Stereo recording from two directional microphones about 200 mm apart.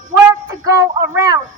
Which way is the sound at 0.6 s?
15° right (ahead or behind).